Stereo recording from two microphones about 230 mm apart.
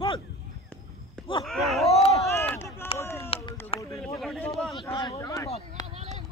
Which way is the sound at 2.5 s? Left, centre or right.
Centre.